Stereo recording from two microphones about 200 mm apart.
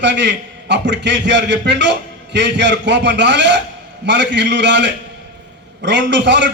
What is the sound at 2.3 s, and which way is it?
A man's voice, 60° right (ahead or behind).